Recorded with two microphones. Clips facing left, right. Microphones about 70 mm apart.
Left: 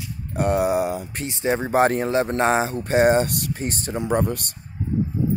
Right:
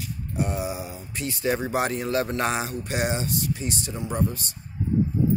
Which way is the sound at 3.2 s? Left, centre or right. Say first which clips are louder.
Left 4 dB; left.